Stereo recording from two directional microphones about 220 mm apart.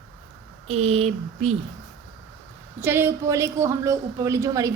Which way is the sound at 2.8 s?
10° right (ahead or behind).